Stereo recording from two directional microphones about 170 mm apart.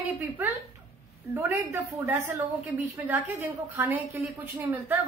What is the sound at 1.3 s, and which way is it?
Speech, 15° right (ahead or behind).